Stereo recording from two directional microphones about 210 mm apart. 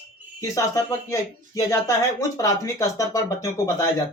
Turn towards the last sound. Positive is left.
turn(degrees=15)  # may be behind; listen again after turning